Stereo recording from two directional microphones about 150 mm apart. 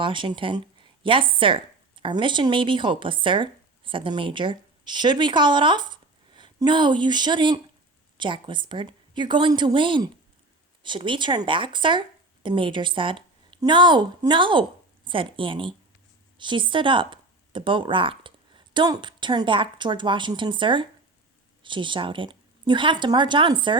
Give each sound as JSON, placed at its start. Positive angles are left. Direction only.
{"t": 0.0, "sound": "speech", "side_deg": -35}